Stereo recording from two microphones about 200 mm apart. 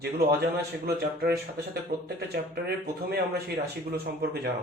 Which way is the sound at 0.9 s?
50° right (ahead or behind).